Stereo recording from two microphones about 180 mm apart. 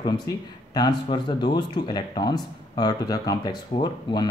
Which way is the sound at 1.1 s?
25° left (ahead or behind).